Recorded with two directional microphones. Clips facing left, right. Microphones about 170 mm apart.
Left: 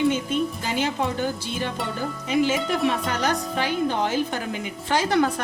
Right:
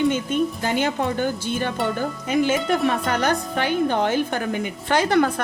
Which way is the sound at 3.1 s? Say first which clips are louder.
Right 3 dB; 55° right (ahead or behind).